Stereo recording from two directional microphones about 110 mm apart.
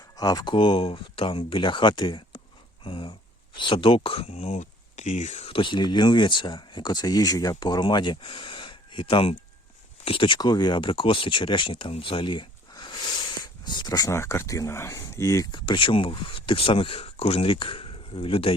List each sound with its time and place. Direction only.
0.2 s speech: 35° left (ahead or behind)
0.5 s speech: 55° left (ahead or behind); by 5.5 s 90° left
5.5 s speech: 50° left (ahead or behind); by 15.4 s 30° left (ahead or behind)
15.5 s speech: 45° left (ahead or behind)